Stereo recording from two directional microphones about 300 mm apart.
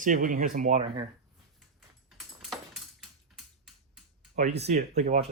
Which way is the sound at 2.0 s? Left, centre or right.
Centre.